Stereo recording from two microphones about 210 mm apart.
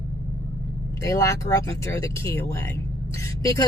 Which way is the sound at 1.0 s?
15° left (ahead or behind).